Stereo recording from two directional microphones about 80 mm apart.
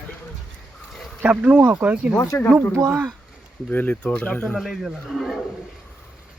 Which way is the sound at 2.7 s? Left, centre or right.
Right.